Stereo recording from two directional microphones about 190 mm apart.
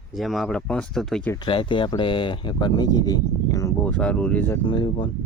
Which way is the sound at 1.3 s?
25° left (ahead or behind).